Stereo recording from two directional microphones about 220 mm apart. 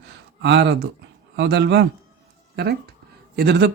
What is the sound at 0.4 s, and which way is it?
Speech, 50° right (ahead or behind).